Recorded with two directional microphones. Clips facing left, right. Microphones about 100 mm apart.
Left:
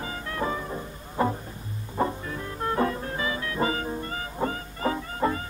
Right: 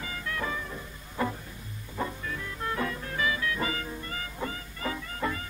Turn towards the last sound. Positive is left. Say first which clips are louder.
# left 6 dB
turn(degrees=35)  # may be behind; listen again after turning